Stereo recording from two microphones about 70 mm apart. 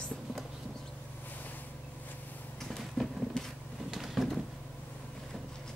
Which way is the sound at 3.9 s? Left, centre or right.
Centre.